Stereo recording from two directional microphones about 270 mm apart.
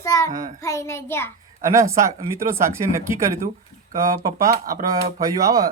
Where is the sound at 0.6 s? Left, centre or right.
Centre.